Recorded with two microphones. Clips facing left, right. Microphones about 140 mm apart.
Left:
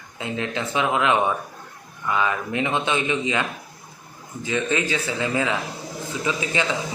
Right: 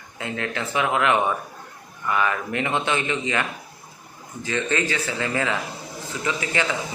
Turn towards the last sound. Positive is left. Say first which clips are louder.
# left 1 dB
turn(degrees=20)  # may be behind; listen again after turning